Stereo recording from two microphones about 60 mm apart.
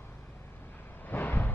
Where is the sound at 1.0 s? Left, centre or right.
Left.